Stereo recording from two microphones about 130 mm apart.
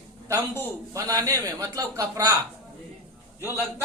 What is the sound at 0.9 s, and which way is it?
A man's voice, 25° right (ahead or behind).